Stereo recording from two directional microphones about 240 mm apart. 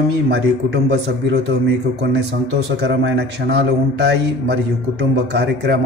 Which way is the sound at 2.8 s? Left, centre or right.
Right.